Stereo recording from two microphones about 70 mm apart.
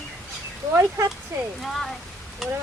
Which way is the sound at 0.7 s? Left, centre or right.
Right.